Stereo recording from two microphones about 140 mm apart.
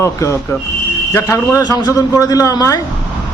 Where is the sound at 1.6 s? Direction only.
30° left (ahead or behind).